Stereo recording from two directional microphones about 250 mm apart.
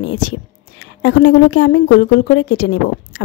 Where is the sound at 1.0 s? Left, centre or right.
Left.